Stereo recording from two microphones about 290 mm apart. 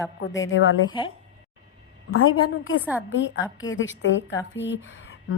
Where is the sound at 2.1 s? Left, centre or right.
Left.